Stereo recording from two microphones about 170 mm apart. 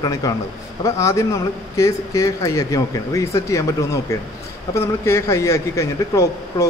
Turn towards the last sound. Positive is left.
turn(degrees=15)  # may be behind; listen again after turning